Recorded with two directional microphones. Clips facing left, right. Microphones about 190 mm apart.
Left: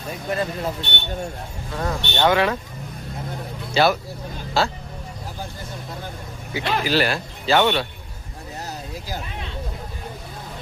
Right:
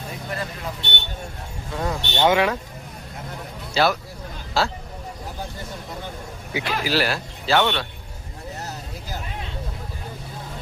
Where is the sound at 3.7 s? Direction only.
Centre (ahead or behind).